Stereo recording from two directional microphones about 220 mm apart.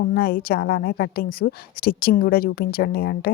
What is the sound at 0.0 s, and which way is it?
A woman's voice, 45° left (ahead or behind).